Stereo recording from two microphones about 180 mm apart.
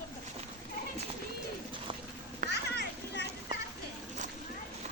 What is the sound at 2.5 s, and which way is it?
Children playing, 65° left (ahead or behind).